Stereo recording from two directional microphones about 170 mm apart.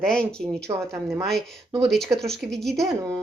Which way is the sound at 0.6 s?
15° right (ahead or behind).